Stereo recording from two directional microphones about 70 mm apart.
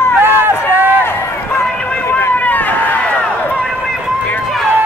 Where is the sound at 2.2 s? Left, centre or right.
Left.